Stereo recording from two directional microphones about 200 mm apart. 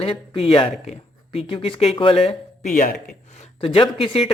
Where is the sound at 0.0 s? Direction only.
30° left (ahead or behind).